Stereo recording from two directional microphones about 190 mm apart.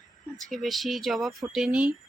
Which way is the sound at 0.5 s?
Centre (ahead or behind).